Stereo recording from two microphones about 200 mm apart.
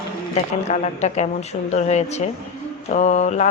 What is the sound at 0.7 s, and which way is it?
Speech, 35° left (ahead or behind).